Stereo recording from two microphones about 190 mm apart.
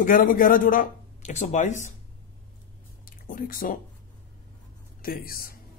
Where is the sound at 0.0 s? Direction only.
45° left (ahead or behind).